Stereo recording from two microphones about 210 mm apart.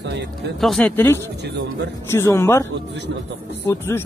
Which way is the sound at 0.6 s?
Centre (ahead or behind).